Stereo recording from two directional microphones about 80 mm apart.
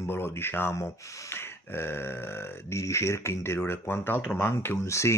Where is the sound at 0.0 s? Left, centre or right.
Left.